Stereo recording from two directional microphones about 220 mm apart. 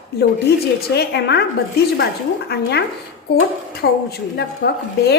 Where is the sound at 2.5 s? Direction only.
50° left (ahead or behind).